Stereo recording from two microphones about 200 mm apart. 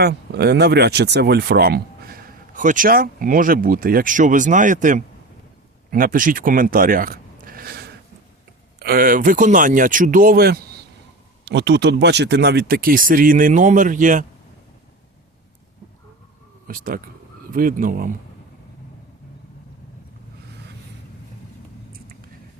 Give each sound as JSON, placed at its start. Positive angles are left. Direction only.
{"t": 0.0, "sound": "speech", "side_deg": -55}
{"t": 16.6, "sound": "speech", "side_deg": -45}
{"t": 21.9, "sound": "a sound", "side_deg": -45}